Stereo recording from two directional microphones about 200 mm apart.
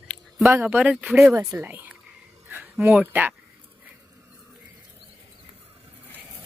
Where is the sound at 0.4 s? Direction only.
10° right (ahead or behind).